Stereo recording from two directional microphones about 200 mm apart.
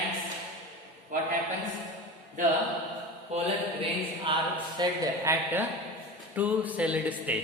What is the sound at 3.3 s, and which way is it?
Mantra, 35° right (ahead or behind).